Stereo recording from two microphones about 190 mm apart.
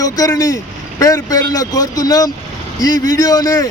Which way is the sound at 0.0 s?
20° left (ahead or behind).